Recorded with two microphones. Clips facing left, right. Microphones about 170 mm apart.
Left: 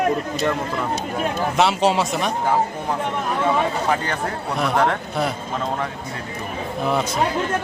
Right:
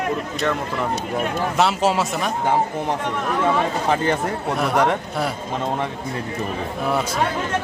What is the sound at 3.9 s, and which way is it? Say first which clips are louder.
Speech: right 4 dB; 25° right (ahead or behind).